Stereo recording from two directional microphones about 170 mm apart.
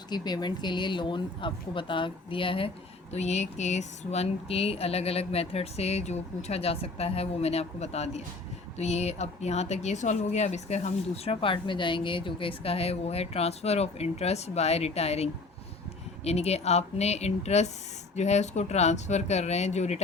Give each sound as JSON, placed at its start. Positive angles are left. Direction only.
{"t": 0.1, "sound": "a woman's voice", "side_deg": 25}